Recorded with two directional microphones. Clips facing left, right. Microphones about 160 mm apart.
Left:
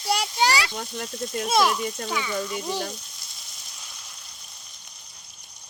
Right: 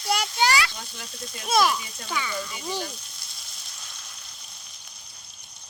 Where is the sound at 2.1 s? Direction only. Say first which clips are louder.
Right 3 dB; 15° left (ahead or behind).